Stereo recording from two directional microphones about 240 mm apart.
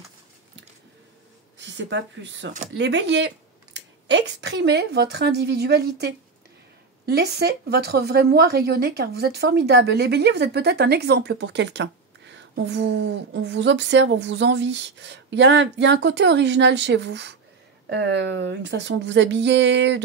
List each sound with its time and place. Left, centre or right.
1.7 s a woman's voice: right